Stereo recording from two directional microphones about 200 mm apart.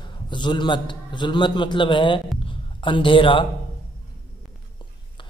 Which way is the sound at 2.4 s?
25° left (ahead or behind).